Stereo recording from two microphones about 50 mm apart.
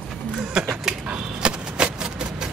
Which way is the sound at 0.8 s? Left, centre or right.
Centre.